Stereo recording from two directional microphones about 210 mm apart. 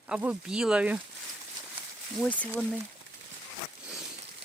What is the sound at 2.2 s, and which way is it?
Speech, 5° left (ahead or behind).